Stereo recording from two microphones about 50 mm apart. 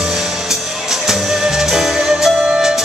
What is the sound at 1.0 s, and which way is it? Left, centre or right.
Music, centre.